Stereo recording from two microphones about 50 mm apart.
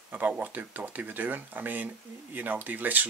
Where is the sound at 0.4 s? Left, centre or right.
Right.